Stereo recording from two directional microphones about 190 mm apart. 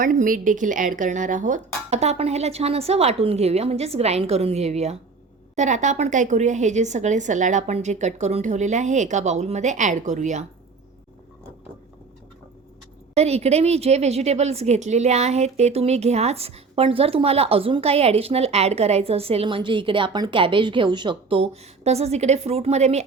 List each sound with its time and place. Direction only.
0.0 s a woman's voice: 45° right (ahead or behind)
13.1 s a woman's voice: 35° right (ahead or behind)